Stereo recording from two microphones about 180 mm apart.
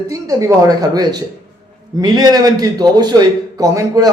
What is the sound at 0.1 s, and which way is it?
Speech, 20° right (ahead or behind).